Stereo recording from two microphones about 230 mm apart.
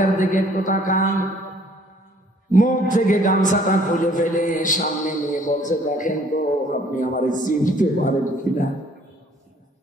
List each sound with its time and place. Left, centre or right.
0.0 s a man's voice: left
2.5 s a man's voice: left